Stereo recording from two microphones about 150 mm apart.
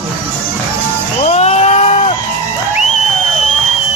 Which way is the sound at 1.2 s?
45° left (ahead or behind).